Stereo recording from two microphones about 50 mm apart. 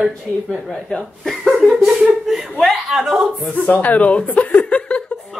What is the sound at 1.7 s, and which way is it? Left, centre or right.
Chuckle, centre.